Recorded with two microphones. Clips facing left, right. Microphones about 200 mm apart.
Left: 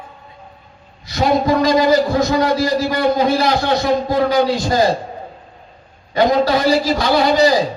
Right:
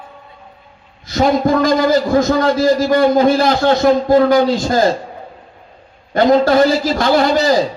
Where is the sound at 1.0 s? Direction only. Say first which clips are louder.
Right 2 dB; 50° right (ahead or behind).